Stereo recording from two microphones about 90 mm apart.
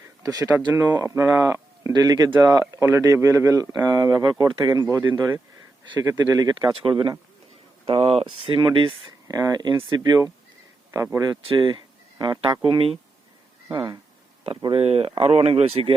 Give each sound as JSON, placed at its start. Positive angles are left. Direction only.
{"t": 0.2, "sound": "speech", "side_deg": -45}
{"t": 1.9, "sound": "speech", "side_deg": -45}
{"t": 2.8, "sound": "speech", "side_deg": -35}
{"t": 6.0, "sound": "speech", "side_deg": -40}
{"t": 6.8, "sound": "speech", "side_deg": -75}
{"t": 7.9, "sound": "speech", "side_deg": -90}
{"t": 9.2, "sound": "speech", "side_deg": -40}
{"t": 10.9, "sound": "speech", "side_deg": -30}
{"t": 11.2, "sound": "speech", "side_deg": -55}
{"t": 12.2, "sound": "speech", "side_deg": -70}
{"t": 14.7, "sound": "speech", "side_deg": -90}